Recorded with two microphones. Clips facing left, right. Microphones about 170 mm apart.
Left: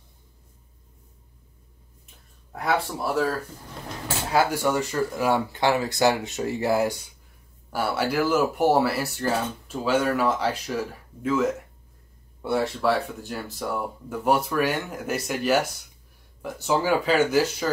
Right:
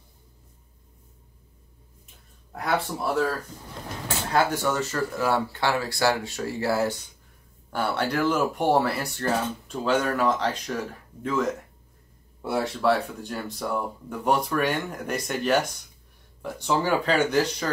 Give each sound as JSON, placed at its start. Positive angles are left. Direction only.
{"t": 2.5, "sound": "speech", "side_deg": 0}